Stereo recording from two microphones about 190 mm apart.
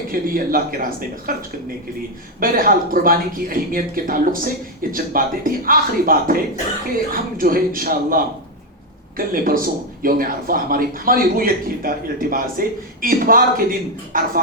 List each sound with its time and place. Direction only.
0.1 s speech: 50° right (ahead or behind)
2.4 s speech: 50° right (ahead or behind)